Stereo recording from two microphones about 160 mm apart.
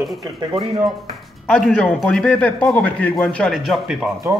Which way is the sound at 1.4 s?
5° left (ahead or behind).